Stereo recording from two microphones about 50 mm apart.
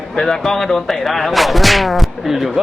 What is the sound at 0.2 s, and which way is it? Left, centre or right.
Speech, centre.